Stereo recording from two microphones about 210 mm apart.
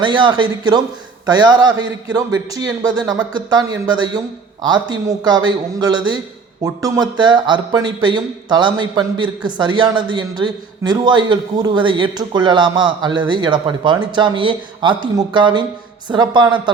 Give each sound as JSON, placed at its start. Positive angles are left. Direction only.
{"t": 0.0, "sound": "speech", "side_deg": -20}